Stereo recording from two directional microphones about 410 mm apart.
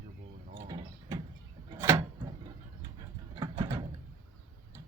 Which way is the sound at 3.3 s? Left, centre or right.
Centre.